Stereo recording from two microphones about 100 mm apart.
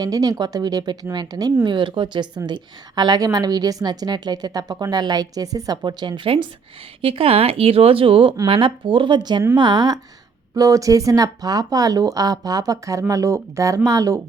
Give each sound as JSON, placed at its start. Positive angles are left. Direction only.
{"t": 0.0, "sound": "a woman's voice", "side_deg": -40}
{"t": 1.6, "sound": "a woman's voice", "side_deg": -50}